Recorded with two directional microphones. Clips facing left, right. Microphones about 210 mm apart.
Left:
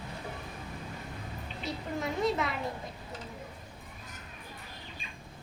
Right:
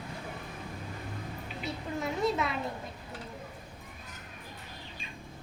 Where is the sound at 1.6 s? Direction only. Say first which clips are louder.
Even; centre (ahead or behind).